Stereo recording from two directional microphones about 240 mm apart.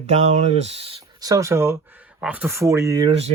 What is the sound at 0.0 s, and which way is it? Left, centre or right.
Speech, right.